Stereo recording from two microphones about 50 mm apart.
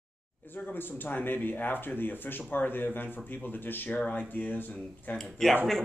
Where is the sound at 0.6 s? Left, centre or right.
Left.